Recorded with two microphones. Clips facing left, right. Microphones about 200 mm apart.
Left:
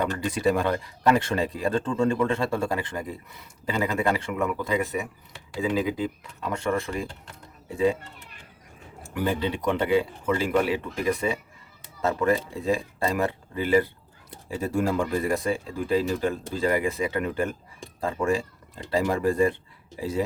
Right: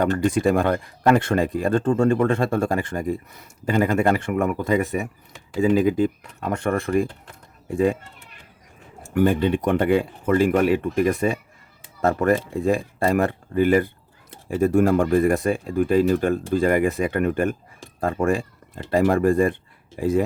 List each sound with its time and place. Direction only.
0.0 s speech: 50° right (ahead or behind)
9.1 s speech: 50° right (ahead or behind)